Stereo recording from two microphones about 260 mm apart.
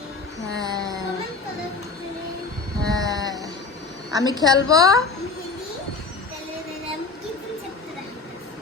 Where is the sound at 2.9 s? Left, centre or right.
Centre.